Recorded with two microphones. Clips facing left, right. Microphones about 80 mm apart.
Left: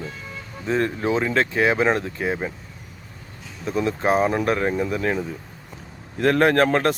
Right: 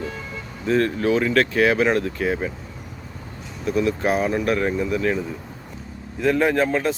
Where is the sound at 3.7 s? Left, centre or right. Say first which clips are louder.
Even; left.